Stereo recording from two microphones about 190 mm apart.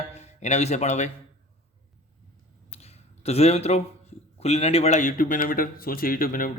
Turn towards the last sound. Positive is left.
turn(degrees=50)  # may be behind; listen again after turning